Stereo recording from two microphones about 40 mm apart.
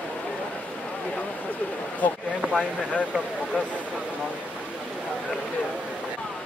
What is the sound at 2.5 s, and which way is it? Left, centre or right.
Speech, left.